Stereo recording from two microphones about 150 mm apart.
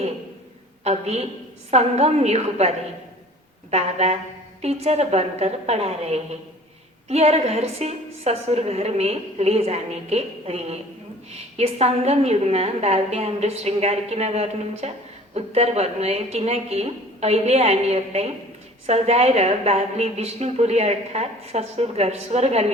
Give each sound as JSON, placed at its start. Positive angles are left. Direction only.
{"t": 0.9, "sound": "a woman's voice", "side_deg": -45}